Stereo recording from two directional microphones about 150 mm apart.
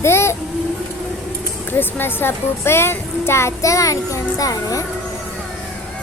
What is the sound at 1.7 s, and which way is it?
A child's voice, 15° left (ahead or behind).